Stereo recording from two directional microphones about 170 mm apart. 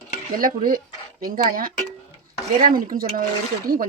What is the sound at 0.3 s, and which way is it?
Speech, 55° right (ahead or behind).